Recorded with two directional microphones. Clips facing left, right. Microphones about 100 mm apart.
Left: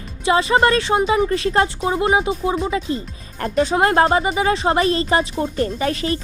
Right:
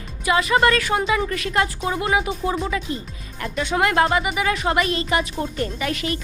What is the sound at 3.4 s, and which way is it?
A woman's voice, 35° left (ahead or behind).